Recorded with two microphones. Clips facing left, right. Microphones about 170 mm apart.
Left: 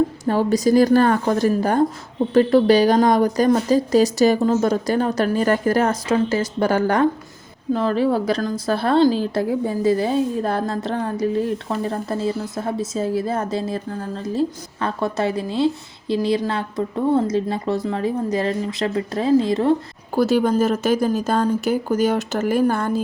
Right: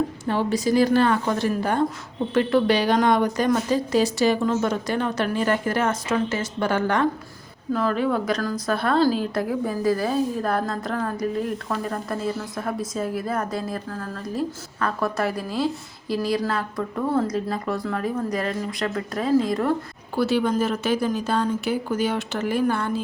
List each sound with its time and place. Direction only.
0.3 s a woman's voice: 40° left (ahead or behind); by 19.7 s 25° left (ahead or behind)
20.1 s speech: 45° left (ahead or behind)